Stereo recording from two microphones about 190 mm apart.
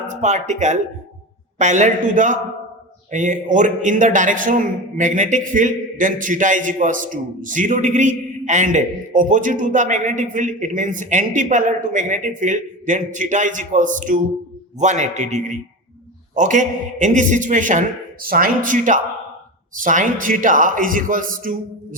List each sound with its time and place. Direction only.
0.1 s a man's voice: 40° right (ahead or behind)